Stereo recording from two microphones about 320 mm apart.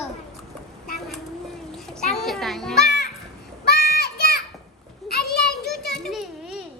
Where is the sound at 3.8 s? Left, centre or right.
Left.